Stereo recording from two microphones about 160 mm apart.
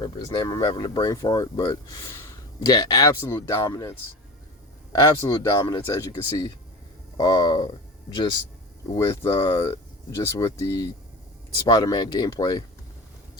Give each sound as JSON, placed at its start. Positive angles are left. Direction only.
{"t": 0.0, "sound": "speech", "side_deg": 20}
{"t": 8.9, "sound": "speech", "side_deg": 20}